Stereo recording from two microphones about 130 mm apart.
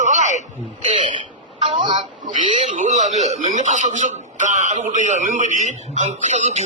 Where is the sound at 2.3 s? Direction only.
70° right (ahead or behind).